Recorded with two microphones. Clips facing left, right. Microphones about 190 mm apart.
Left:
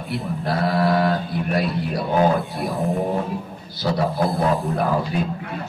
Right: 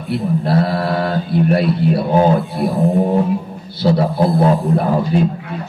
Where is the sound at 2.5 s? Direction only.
Centre (ahead or behind).